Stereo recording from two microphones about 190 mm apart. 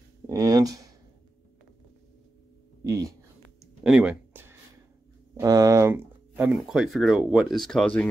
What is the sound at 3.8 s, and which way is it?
Speech, 5° right (ahead or behind).